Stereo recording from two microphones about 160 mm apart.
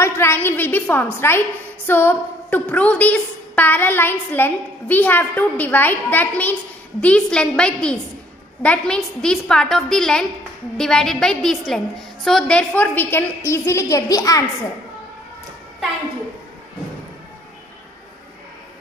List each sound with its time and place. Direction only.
0.0 s a woman's voice: 15° left (ahead or behind)